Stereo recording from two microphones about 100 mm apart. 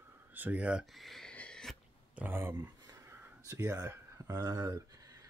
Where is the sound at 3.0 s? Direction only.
25° right (ahead or behind).